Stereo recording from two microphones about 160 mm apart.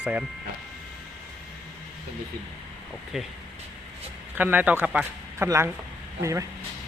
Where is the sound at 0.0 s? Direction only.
10° right (ahead or behind).